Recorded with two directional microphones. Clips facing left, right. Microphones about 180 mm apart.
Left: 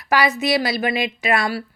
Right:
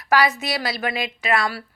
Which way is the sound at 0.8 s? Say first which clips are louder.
Left 3 dB; 35° right (ahead or behind).